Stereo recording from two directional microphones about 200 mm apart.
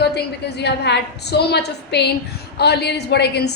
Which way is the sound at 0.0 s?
55° left (ahead or behind).